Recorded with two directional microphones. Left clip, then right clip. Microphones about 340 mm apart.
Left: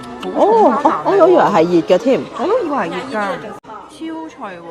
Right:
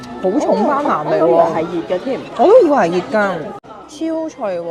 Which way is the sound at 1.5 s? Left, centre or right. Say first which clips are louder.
Left 7 dB; left.